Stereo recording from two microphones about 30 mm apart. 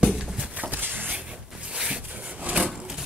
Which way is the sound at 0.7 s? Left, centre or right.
Right.